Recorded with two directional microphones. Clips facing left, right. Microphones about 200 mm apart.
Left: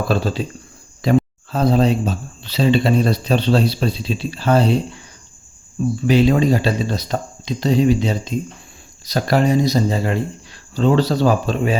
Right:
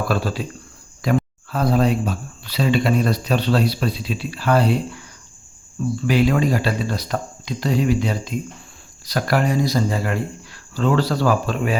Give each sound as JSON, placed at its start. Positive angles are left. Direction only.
{"t": 0.1, "sound": "speech", "side_deg": 25}